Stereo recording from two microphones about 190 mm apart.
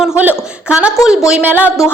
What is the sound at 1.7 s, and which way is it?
Speech, 10° left (ahead or behind).